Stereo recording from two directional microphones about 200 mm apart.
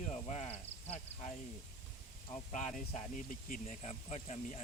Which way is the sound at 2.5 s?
35° left (ahead or behind).